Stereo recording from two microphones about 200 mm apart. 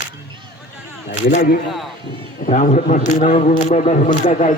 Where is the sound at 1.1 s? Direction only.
35° left (ahead or behind).